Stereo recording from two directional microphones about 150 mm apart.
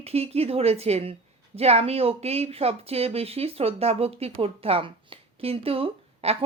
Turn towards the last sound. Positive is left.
turn(degrees=-40)  # may be behind; listen again after turning